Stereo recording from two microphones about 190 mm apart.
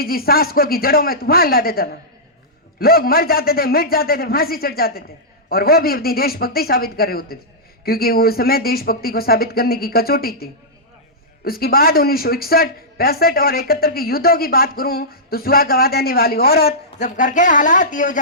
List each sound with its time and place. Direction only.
0.0 s speech: 50° left (ahead or behind)
17.0 s speech: 40° left (ahead or behind)